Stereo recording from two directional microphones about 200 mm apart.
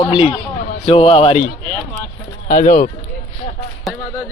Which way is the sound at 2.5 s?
40° left (ahead or behind).